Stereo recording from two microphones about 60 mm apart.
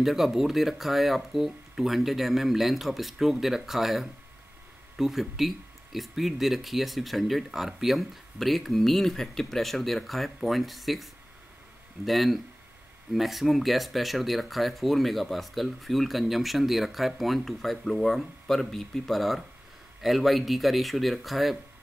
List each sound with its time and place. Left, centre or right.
0.0 s speech: centre